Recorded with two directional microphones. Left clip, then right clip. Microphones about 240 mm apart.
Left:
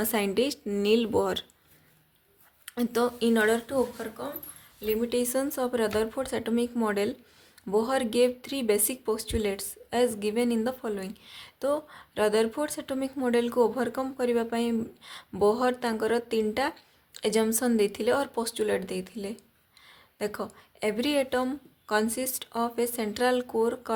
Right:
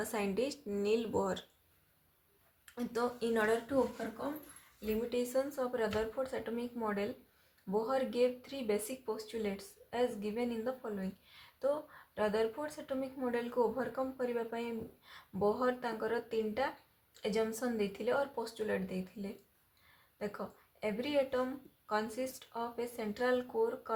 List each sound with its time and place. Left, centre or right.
0.0 s speech: left
2.7 s speech: left
4.8 s speech: left